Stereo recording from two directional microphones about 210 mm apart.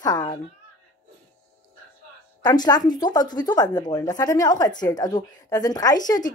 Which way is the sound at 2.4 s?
20° left (ahead or behind).